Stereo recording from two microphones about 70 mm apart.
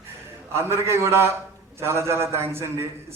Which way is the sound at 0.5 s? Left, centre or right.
Right.